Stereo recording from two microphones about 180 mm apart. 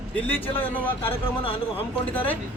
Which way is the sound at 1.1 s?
30° left (ahead or behind).